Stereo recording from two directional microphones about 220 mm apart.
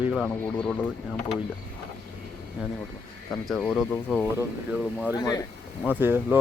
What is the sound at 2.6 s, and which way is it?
Speech, 5° right (ahead or behind).